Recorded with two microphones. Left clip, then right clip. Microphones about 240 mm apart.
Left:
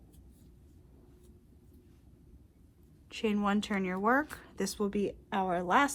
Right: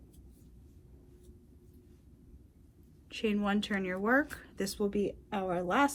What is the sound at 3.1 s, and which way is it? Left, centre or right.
Speech, left.